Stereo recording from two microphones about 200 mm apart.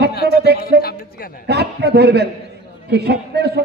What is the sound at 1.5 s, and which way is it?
A man's voice, 55° right (ahead or behind).